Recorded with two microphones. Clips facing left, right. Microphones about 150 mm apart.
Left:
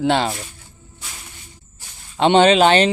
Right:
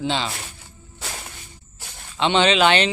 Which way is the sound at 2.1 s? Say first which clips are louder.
Left 6 dB; 45° left (ahead or behind).